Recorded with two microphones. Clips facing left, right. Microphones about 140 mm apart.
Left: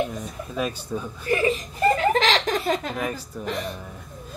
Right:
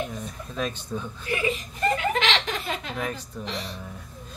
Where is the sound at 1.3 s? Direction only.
40° left (ahead or behind).